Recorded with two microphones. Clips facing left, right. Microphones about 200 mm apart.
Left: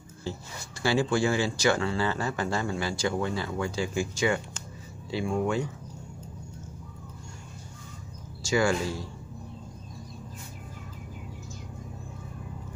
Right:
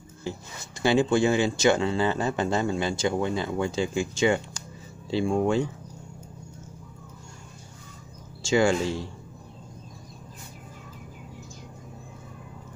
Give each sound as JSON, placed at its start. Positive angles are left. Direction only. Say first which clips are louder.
{"t": 0.2, "sound": "speech", "louder": "right 1 dB", "side_deg": -20}
{"t": 8.4, "sound": "speech", "louder": "right 3 dB", "side_deg": -25}